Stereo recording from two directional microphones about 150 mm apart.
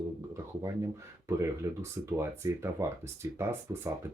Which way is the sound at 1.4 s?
20° right (ahead or behind).